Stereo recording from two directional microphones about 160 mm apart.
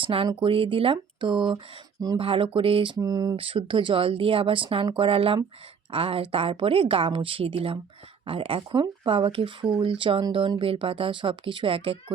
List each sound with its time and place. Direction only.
0.0 s speech: 35° right (ahead or behind)